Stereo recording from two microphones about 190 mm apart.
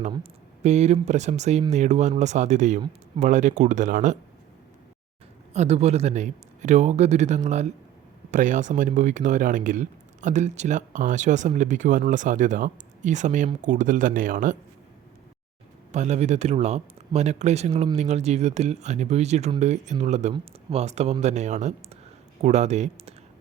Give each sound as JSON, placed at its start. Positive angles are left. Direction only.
{"t": 0.1, "sound": "speech", "side_deg": -35}
{"t": 5.5, "sound": "speech", "side_deg": -35}
{"t": 15.9, "sound": "speech", "side_deg": -35}